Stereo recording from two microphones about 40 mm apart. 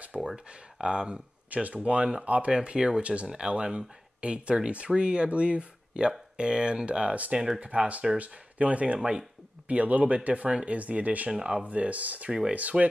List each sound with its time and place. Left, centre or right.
0.1 s speech: centre
0.5 s speech: right
1.5 s speech: right
7.3 s speech: centre
7.6 s speech: right
11.6 s speech: right
12.3 s speech: right
12.5 s speech: right